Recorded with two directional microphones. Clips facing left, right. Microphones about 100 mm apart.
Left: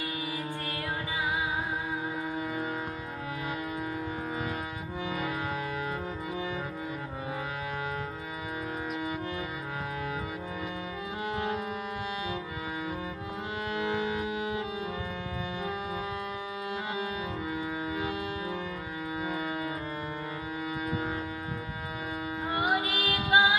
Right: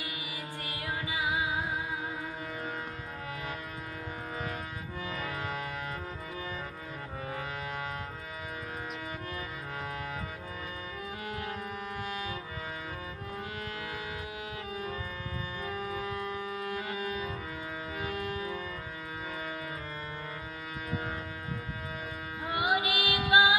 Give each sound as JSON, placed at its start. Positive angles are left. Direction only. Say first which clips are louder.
{"t": 5.1, "sound": "music", "louder": "left 3 dB", "side_deg": 10}
{"t": 11.3, "sound": "music", "louder": "left 7 dB", "side_deg": 20}
{"t": 13.7, "sound": "music", "louder": "left 8 dB", "side_deg": 20}
{"t": 22.6, "sound": "music", "louder": "right 1 dB", "side_deg": -10}